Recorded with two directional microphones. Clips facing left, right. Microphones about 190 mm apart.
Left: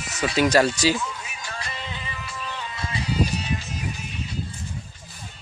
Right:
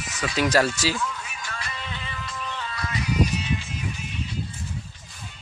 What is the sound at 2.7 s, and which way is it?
Music, 25° left (ahead or behind).